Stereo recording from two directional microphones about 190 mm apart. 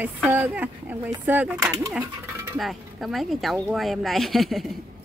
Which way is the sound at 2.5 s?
Centre (ahead or behind).